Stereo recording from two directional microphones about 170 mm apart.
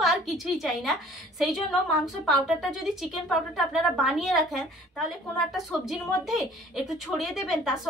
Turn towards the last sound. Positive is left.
turn(degrees=0)  # may be behind; listen again after turning